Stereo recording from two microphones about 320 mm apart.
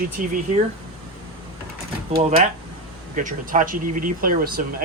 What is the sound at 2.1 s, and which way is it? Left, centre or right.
Speech, centre.